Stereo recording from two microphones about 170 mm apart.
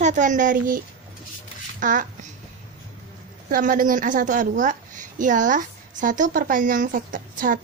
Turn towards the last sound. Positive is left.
turn(degrees=-50)  # may be behind; listen again after turning